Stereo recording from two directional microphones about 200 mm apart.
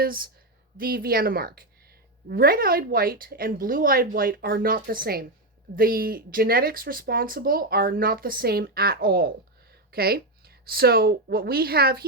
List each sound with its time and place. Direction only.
0.0 s speech: 45° right (ahead or behind)